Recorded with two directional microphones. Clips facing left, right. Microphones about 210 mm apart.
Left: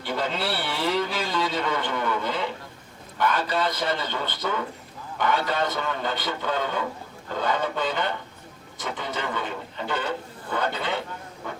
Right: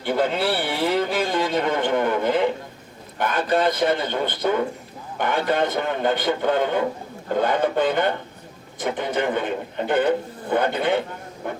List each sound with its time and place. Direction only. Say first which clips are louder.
0.0 s a man's voice: right 6 dB; 55° right (ahead or behind)